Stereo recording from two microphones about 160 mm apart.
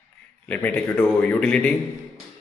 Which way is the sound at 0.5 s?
10° left (ahead or behind).